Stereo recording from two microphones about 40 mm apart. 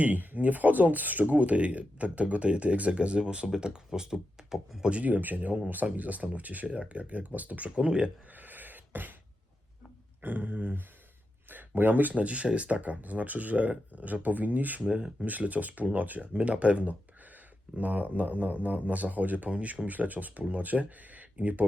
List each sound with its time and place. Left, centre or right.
0.0 s speech: right; by 4.5 s centre
4.9 s speech: right
7.9 s speech: right
8.4 s beatboxing: right
10.2 s speech: right
11.4 s a sound: right
12.1 s speech: right
14.8 s speech: right
19.5 s speech: right
19.9 s speech: right